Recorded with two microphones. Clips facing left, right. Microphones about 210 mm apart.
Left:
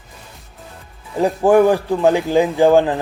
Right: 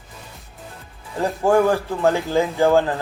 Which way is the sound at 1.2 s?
15° left (ahead or behind).